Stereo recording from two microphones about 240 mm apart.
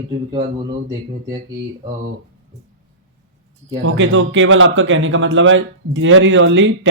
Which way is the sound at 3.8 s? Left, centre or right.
Right.